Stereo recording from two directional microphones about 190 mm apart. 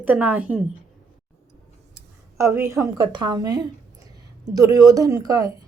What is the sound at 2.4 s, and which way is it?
Speech, 15° right (ahead or behind).